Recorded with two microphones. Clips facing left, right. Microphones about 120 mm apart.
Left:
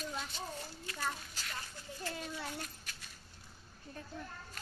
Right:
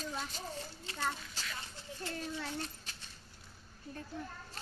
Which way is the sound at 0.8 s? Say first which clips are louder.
Right 2 dB; 25° right (ahead or behind).